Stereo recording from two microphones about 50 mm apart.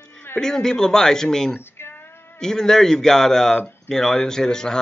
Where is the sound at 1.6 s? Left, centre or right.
Left.